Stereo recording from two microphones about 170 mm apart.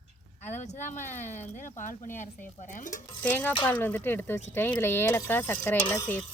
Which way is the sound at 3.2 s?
10° left (ahead or behind).